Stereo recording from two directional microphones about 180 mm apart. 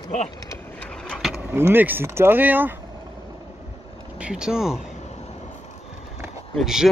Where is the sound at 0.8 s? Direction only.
5° left (ahead or behind).